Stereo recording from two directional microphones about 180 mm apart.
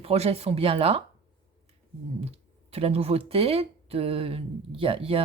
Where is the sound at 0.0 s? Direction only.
35° right (ahead or behind).